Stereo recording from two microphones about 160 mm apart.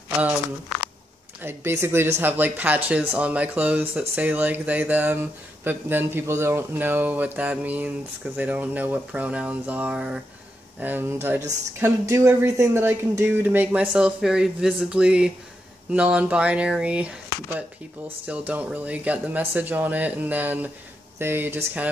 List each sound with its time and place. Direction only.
1.4 s speech: 15° right (ahead or behind)